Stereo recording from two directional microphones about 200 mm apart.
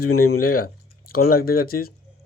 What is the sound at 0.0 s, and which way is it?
Speech, 90° left.